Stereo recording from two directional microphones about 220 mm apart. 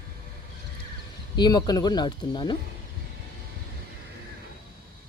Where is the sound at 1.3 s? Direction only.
20° left (ahead or behind).